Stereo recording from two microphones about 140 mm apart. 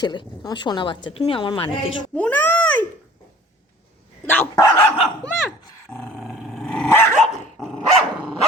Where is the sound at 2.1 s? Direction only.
10° left (ahead or behind).